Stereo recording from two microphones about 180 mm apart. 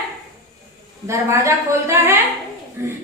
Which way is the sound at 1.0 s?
15° right (ahead or behind).